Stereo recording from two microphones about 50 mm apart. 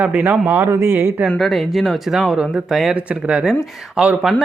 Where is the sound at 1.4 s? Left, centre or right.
Centre.